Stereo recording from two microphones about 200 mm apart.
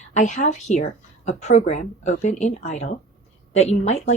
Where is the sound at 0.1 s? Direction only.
35° left (ahead or behind).